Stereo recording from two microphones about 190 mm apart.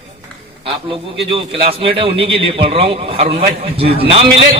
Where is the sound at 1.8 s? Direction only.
30° right (ahead or behind).